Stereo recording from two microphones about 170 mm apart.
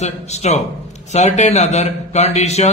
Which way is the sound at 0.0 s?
40° left (ahead or behind).